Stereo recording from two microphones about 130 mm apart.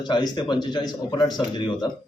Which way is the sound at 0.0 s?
35° left (ahead or behind).